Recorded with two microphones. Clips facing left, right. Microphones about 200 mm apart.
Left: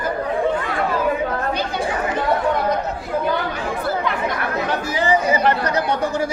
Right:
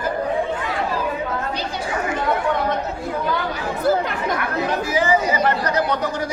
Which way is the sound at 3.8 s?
45° right (ahead or behind).